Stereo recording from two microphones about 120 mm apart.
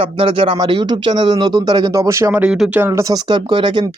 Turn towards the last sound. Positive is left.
turn(degrees=-45)  # may be behind; listen again after turning